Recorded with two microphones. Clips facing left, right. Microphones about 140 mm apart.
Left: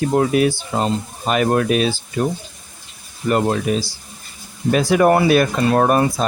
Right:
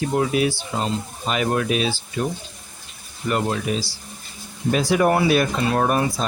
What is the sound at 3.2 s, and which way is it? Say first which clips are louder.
Speech: left 5 dB; 45° left (ahead or behind).